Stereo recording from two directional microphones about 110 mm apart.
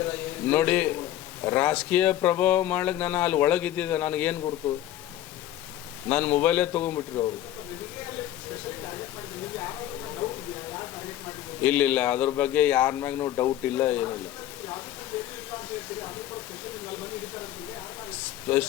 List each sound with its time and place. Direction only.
0.0 s a sound: 15° left (ahead or behind)
1.5 s speech: 15° left (ahead or behind)
6.1 s speech: 15° left (ahead or behind)
11.6 s speech: 15° left (ahead or behind)
13.7 s speech: 15° left (ahead or behind)
18.4 s speech: 15° left (ahead or behind)